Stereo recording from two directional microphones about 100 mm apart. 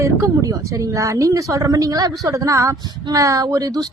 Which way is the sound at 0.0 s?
30° right (ahead or behind).